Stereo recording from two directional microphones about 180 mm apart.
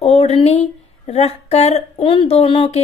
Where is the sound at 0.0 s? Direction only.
35° left (ahead or behind).